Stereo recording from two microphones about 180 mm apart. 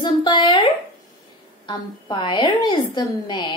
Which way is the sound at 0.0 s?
25° left (ahead or behind).